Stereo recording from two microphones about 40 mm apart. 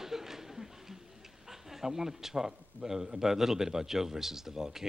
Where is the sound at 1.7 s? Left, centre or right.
Centre.